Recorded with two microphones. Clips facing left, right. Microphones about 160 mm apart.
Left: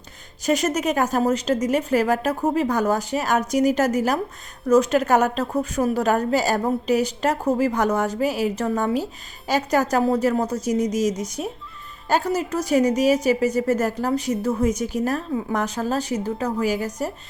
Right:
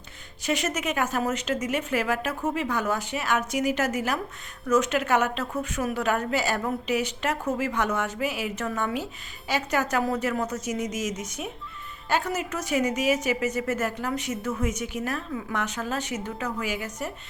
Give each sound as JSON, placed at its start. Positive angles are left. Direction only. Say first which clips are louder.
{"t": 0.4, "sound": "a woman's voice", "louder": "left 6 dB", "side_deg": 40}